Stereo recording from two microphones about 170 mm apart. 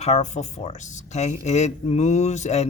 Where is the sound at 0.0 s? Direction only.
40° left (ahead or behind).